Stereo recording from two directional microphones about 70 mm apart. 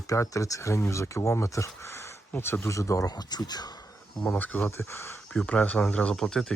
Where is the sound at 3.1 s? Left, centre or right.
Left.